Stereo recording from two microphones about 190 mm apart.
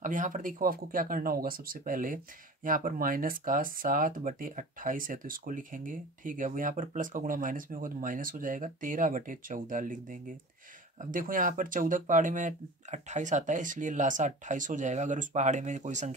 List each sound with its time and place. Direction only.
0.0 s speech: 45° right (ahead or behind)